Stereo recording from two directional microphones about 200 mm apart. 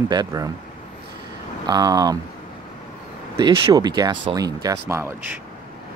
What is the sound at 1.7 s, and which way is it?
Speech, 20° right (ahead or behind).